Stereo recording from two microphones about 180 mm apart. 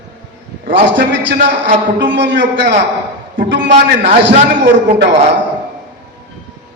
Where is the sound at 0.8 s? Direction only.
85° right.